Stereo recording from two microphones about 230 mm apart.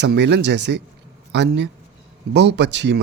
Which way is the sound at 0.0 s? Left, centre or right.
Right.